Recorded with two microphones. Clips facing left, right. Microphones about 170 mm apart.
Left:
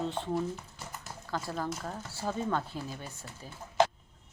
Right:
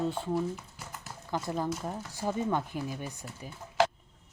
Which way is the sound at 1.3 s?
20° right (ahead or behind).